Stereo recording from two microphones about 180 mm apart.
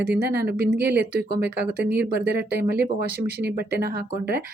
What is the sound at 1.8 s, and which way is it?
Speech, 70° right (ahead or behind).